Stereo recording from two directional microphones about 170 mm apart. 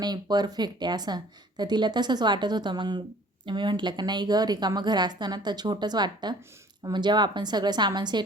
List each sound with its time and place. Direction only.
0.0 s a woman's voice: 25° right (ahead or behind)